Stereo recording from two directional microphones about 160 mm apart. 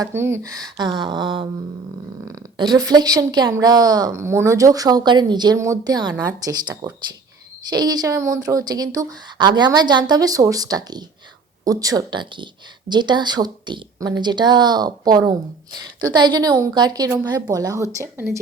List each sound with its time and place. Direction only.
0.0 s speech: 15° right (ahead or behind)